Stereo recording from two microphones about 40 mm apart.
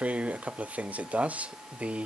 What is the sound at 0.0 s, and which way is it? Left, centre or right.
Speech, right.